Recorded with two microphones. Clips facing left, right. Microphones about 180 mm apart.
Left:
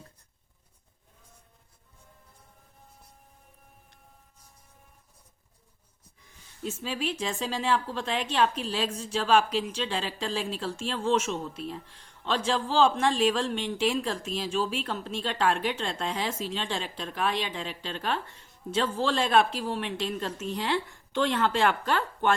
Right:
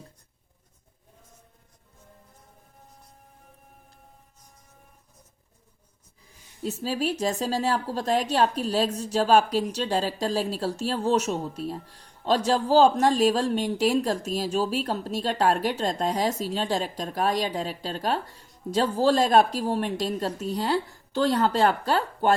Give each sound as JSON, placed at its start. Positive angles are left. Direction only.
{"t": 6.6, "sound": "speech", "side_deg": -35}